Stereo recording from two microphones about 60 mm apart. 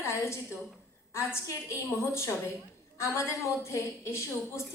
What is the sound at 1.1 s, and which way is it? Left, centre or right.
A woman's voice, left.